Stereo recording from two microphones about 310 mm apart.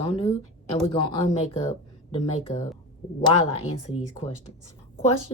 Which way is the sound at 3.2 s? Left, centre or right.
Centre.